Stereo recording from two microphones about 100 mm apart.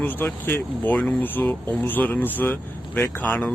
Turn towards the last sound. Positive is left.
turn(degrees=15)  # may be behind; listen again after turning